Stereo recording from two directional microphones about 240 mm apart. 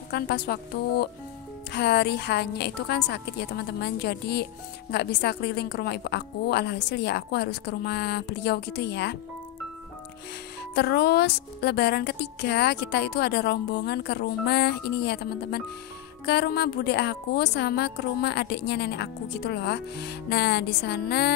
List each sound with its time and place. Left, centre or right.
0.1 s a woman's voice: left
10.7 s a woman's voice: left